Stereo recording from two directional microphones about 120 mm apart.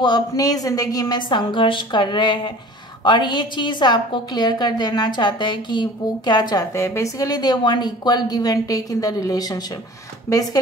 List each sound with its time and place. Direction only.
0.0 s a woman's voice: 35° left (ahead or behind)
6.7 s a woman's voice: 25° left (ahead or behind)